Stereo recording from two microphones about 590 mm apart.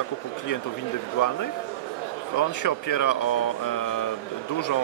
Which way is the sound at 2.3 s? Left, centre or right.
Left.